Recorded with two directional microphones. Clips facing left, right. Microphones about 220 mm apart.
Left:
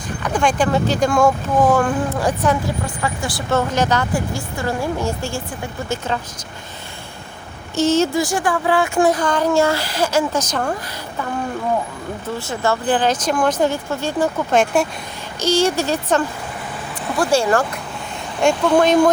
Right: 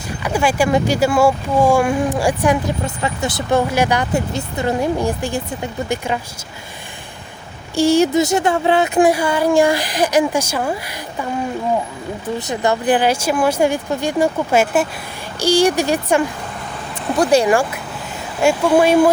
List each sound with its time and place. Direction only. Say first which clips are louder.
0.2 s speech: right 1 dB; 10° right (ahead or behind)
7.8 s speech: right 3 dB; 15° right (ahead or behind)
12.4 s speech: right 2 dB; 20° right (ahead or behind)